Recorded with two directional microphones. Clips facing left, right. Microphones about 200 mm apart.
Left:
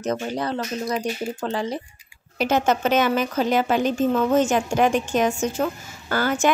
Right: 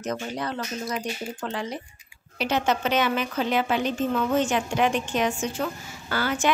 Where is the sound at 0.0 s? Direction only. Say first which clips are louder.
Left 5 dB; 30° left (ahead or behind).